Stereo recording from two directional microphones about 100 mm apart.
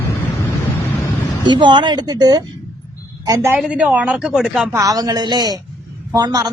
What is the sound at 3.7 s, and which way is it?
Speech, 15° right (ahead or behind).